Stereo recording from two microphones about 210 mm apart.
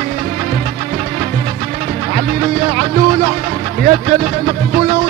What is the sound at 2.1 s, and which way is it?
Speech, 35° right (ahead or behind).